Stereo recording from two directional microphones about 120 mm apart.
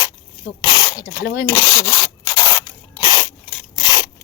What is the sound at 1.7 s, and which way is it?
Rub, 35° left (ahead or behind).